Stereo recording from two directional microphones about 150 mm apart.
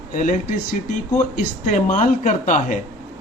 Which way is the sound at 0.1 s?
60° left (ahead or behind).